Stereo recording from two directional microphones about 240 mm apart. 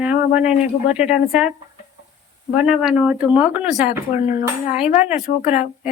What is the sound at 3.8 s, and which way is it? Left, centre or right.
Speech, left.